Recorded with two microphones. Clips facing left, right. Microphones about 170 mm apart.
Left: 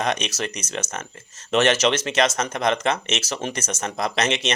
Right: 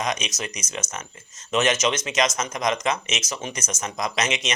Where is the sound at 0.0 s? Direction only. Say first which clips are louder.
Left 3 dB; 60° left (ahead or behind).